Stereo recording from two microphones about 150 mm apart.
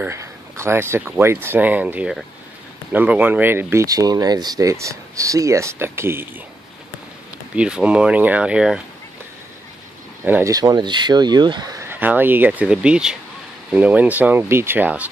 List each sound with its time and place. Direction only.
0.0 s speech: 15° right (ahead or behind)
7.5 s speech: 5° right (ahead or behind)
10.2 s speech: 15° right (ahead or behind)
10.5 s speech: 25° right (ahead or behind); by 15.0 s 10° right (ahead or behind)